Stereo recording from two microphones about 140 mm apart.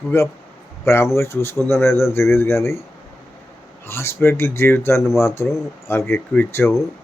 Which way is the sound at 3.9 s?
15° left (ahead or behind).